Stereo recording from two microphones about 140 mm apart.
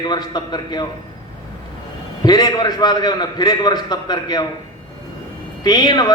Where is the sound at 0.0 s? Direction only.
30° left (ahead or behind).